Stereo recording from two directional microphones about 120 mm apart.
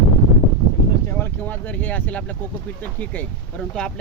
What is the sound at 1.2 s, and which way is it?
Speech, 15° left (ahead or behind).